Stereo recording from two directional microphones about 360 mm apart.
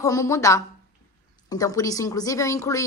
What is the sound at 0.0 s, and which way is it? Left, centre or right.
Speech, centre.